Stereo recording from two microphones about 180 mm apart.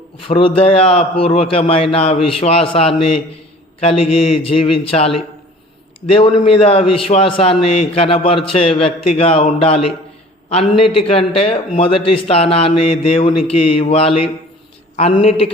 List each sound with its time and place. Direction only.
0.3 s a man's voice: 30° left (ahead or behind)